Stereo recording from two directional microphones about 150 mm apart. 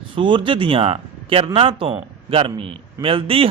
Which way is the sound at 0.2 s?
35° right (ahead or behind).